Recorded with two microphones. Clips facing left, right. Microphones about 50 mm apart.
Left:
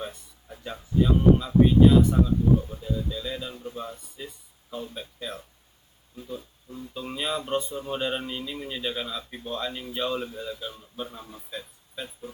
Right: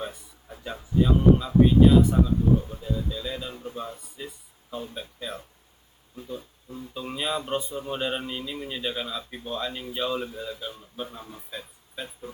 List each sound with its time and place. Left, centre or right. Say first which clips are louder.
0.0 s speech: right 1 dB; centre
4.2 s speech: right 1 dB; centre